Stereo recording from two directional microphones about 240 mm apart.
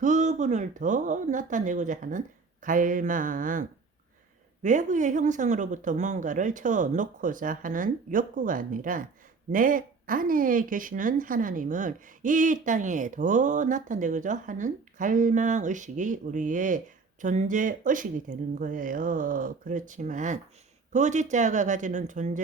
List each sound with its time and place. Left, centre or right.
0.0 s speech: right